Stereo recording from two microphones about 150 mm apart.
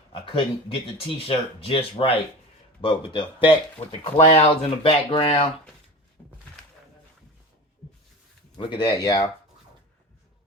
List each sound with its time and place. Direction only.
0.1 s speech: 35° left (ahead or behind)
8.5 s speech: 30° left (ahead or behind)